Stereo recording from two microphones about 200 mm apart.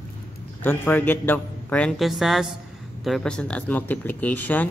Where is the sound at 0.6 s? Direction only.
10° left (ahead or behind).